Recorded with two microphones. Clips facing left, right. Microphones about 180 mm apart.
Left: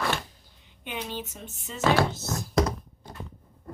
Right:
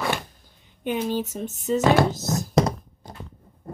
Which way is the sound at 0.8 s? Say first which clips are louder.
Right 10 dB; 45° right (ahead or behind).